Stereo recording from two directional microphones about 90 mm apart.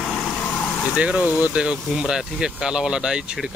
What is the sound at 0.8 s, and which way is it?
Speech, 10° right (ahead or behind).